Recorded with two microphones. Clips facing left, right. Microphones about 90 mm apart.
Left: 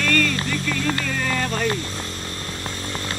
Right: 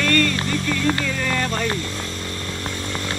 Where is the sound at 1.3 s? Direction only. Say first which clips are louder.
Right 1 dB; 45° right (ahead or behind).